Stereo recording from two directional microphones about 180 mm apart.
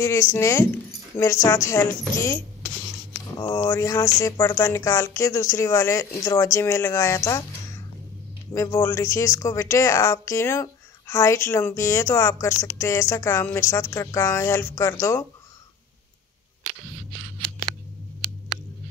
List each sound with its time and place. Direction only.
0.0 s a woman's voice: 15° left (ahead or behind)
8.5 s a woman's voice: 20° left (ahead or behind)